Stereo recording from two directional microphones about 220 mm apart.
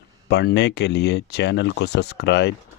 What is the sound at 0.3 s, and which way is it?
Speech, 50° left (ahead or behind).